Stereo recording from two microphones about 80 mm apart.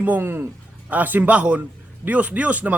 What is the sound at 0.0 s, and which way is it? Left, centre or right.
A woman's voice, right.